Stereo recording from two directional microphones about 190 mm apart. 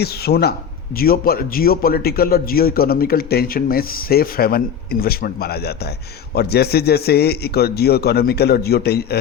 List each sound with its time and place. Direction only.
0.0 s a man's voice: 55° left (ahead or behind)